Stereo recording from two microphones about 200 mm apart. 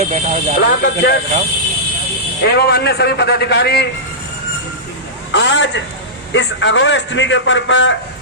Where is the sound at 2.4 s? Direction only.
55° left (ahead or behind).